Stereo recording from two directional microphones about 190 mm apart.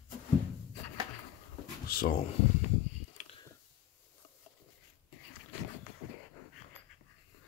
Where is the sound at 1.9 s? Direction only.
50° left (ahead or behind).